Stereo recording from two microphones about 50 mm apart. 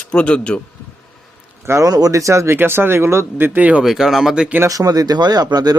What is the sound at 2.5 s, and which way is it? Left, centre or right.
Speech, right.